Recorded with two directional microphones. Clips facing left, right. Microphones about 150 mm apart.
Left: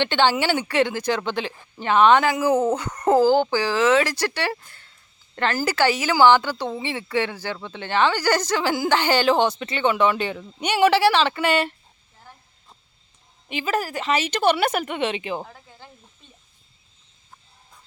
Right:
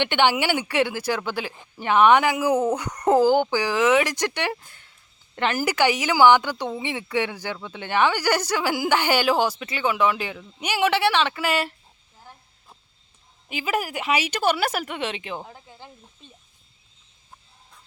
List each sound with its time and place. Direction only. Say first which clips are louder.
0.0 s speech: left 1 dB; 15° right (ahead or behind)
13.5 s speech: left 1 dB; 10° right (ahead or behind)
15.4 s speech: right 2 dB; 20° right (ahead or behind)